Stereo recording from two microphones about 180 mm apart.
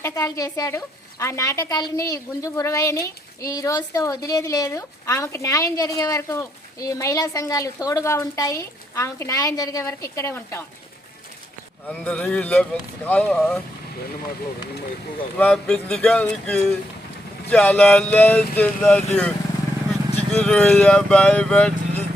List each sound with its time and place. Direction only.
0.0 s a woman's voice: 20° left (ahead or behind)
11.9 s a woman's voice: 5° left (ahead or behind)
15.4 s a woman's voice: 5° left (ahead or behind)
20.1 s speech: 5° left (ahead or behind)